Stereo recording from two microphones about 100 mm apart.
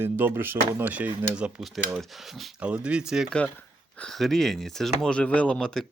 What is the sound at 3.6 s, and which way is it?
Speech, 10° left (ahead or behind).